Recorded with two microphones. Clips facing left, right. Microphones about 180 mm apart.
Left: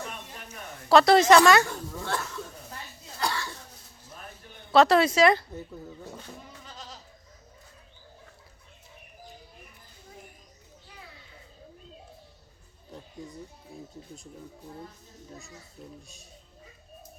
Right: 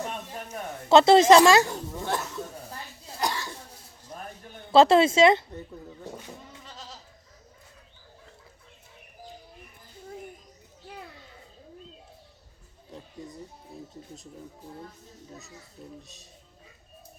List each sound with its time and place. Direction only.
0.9 s speech: 25° right (ahead or behind)
3.2 s a sound: 20° right (ahead or behind)
4.7 s speech: 25° right (ahead or behind)
15.8 s speech: 5° left (ahead or behind)